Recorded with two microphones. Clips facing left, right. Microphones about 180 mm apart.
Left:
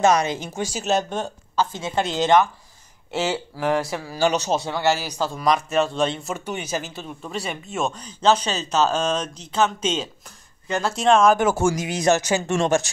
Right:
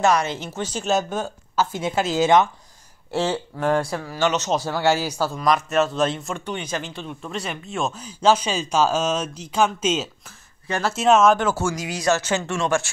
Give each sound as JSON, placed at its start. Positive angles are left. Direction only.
{"t": 0.0, "sound": "speech", "side_deg": 20}
{"t": 0.8, "sound": "speech", "side_deg": 0}
{"t": 3.1, "sound": "speech", "side_deg": 5}
{"t": 4.2, "sound": "a man's voice", "side_deg": 35}
{"t": 4.6, "sound": "speech", "side_deg": -5}
{"t": 11.6, "sound": "speech", "side_deg": 20}